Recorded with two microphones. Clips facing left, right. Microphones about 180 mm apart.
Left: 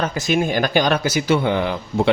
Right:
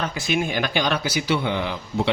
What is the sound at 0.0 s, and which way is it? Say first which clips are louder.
Speech: left 4 dB; 40° left (ahead or behind).